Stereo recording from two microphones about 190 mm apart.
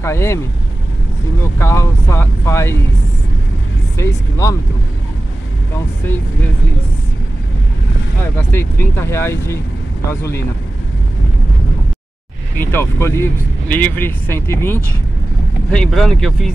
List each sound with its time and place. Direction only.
0.0 s speech: 15° left (ahead or behind)
1.6 s speech: 15° left (ahead or behind)
4.0 s speech: 15° left (ahead or behind)
8.4 s speech: 10° left (ahead or behind)
12.5 s speech: 15° left (ahead or behind)